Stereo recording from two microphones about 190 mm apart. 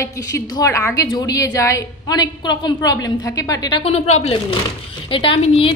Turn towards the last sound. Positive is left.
turn(degrees=30)  # may be behind; listen again after turning